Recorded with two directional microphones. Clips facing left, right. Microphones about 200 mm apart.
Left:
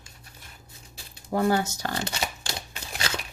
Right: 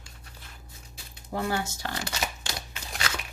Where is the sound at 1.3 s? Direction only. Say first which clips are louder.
Left 6 dB; 40° left (ahead or behind).